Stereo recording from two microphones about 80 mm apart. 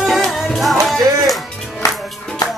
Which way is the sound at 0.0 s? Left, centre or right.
Centre.